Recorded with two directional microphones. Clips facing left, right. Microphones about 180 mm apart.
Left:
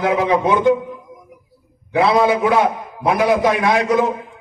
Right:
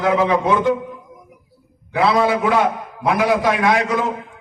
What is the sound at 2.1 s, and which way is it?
A man's voice, 20° left (ahead or behind).